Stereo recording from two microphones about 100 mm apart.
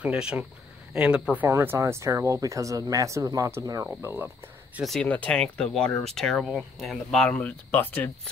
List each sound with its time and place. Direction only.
0.0 s speech: 10° right (ahead or behind)
1.5 s speech: 25° right (ahead or behind)
4.0 s speech: 20° right (ahead or behind)
5.0 s speech: 15° left (ahead or behind)